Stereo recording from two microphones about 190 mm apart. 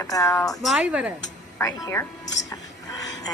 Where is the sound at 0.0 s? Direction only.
15° left (ahead or behind).